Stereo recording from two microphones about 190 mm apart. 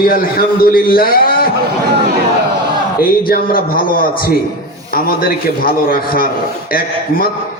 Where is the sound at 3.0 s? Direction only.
50° left (ahead or behind).